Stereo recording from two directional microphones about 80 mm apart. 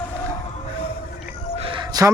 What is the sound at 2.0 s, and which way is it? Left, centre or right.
Speech, right.